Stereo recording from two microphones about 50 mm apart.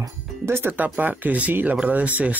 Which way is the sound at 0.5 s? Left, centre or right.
Right.